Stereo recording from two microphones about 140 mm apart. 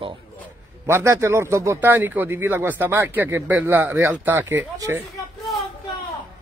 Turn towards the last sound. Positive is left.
turn(degrees=0)  # may be behind; listen again after turning